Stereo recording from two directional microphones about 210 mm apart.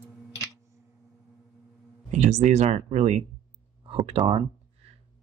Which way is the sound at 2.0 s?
35° right (ahead or behind).